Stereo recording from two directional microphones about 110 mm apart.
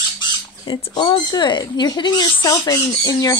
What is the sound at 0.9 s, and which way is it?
Speech, 45° left (ahead or behind).